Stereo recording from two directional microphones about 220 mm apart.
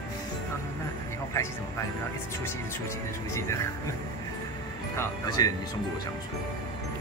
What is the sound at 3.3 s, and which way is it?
Speech, 15° left (ahead or behind).